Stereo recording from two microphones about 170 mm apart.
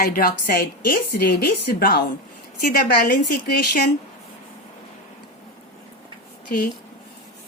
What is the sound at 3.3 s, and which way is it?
Speech, 60° left (ahead or behind).